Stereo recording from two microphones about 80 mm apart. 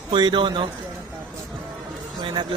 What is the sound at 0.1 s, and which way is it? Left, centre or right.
Speech, right.